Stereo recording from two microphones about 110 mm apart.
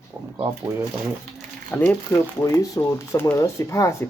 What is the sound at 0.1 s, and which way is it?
Speech, 10° right (ahead or behind).